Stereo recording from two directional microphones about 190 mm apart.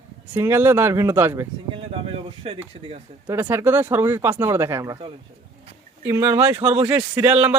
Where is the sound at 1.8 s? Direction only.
30° right (ahead or behind).